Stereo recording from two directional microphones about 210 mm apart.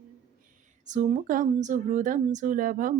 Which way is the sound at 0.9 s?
35° right (ahead or behind).